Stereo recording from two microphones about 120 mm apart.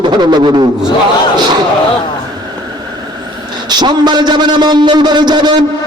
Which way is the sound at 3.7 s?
35° right (ahead or behind).